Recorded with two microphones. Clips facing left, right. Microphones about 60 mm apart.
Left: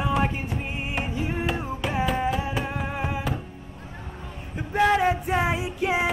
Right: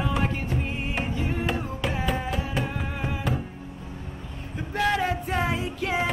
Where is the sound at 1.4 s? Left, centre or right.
Centre.